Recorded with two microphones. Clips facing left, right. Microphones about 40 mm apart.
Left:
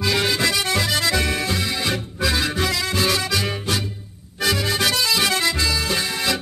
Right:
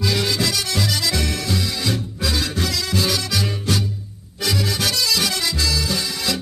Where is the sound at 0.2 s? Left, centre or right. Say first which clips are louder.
Left 2 dB; centre.